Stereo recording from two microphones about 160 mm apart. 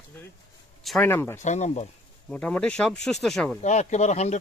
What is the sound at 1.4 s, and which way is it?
Speech, 45° left (ahead or behind).